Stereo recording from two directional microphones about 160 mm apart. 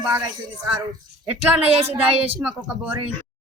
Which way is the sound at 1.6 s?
40° right (ahead or behind).